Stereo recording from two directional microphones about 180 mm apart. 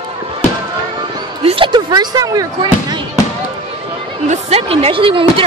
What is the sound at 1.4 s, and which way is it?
Speech, 30° right (ahead or behind).